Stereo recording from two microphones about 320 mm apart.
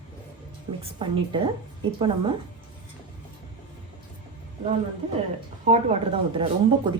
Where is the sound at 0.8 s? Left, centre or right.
Centre.